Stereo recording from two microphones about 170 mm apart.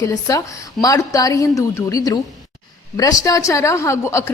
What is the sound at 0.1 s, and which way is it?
A woman's voice, 20° left (ahead or behind).